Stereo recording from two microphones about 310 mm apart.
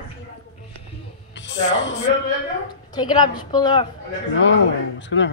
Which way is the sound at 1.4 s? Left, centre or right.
Left.